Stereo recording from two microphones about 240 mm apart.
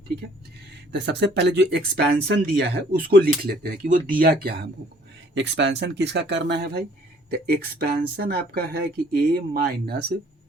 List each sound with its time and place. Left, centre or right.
0.9 s speech: right